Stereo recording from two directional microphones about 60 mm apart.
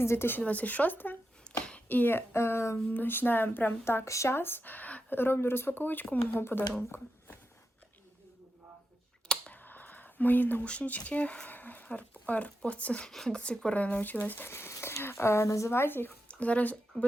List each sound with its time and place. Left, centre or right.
0.0 s speech: left
0.4 s speech: left
1.5 s a sound: centre
1.9 s speech: left
2.9 s speech: left
4.0 s speech: left
9.5 s a sound: left
10.6 s speech: left
13.1 s speech: centre; by 15.7 s left
15.7 s speech: left
16.3 s speech: left